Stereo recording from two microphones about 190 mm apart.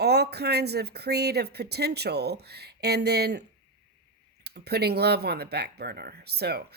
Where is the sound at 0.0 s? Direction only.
60° right (ahead or behind).